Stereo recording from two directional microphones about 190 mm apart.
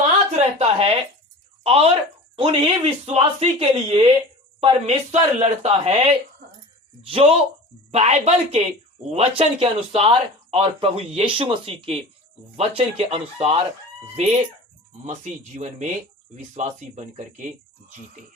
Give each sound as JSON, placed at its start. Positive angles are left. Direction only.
{"t": 0.3, "sound": "a woman's voice", "side_deg": -30}
{"t": 4.6, "sound": "speech", "side_deg": -35}
{"t": 15.0, "sound": "speech", "side_deg": -40}